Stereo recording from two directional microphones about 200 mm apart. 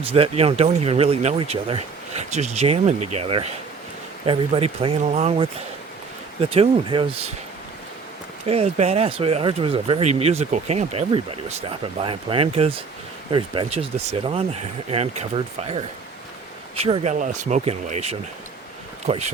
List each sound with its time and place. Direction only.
0.0 s speech: 30° right (ahead or behind)
8.4 s speech: 30° right (ahead or behind)